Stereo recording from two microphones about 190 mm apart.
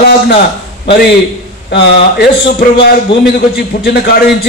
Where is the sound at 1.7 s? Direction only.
65° left (ahead or behind).